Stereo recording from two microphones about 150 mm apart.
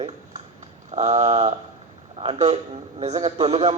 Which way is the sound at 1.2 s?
45° right (ahead or behind).